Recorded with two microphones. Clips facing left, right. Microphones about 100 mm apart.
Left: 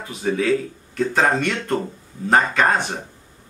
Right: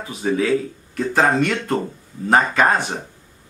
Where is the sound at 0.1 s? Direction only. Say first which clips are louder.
Right 1 dB; 5° right (ahead or behind).